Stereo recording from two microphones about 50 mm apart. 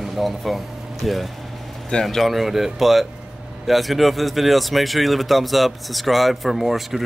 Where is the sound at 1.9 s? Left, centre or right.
Centre.